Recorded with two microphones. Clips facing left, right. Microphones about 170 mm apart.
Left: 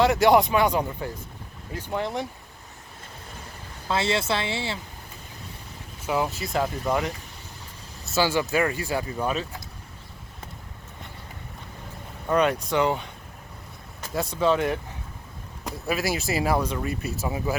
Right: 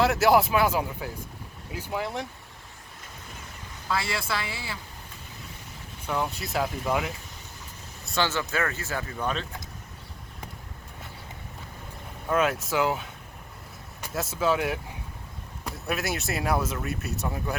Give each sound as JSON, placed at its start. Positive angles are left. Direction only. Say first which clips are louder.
{"t": 0.0, "sound": "speech", "louder": "left 2 dB", "side_deg": 0}
{"t": 3.8, "sound": "speech", "louder": "left 5 dB", "side_deg": 25}
{"t": 6.1, "sound": "speech", "louder": "left 3 dB", "side_deg": 5}
{"t": 12.3, "sound": "speech", "louder": "left 3 dB", "side_deg": 0}
{"t": 14.1, "sound": "speech", "louder": "left 3 dB", "side_deg": 0}